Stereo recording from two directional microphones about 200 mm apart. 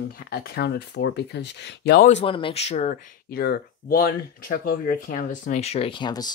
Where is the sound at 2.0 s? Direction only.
30° left (ahead or behind).